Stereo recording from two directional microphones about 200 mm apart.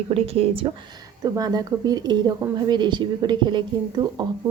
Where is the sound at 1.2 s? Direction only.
20° right (ahead or behind).